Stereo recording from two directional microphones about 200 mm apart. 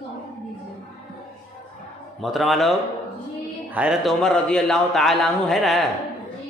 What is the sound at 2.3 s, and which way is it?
Speech, centre (ahead or behind).